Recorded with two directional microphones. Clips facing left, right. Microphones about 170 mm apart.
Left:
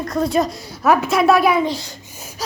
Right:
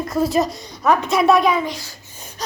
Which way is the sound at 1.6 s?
25° left (ahead or behind).